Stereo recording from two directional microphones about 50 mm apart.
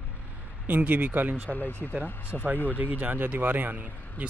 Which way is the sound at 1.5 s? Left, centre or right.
Left.